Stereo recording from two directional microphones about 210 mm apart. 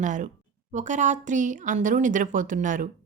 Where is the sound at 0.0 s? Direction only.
35° right (ahead or behind).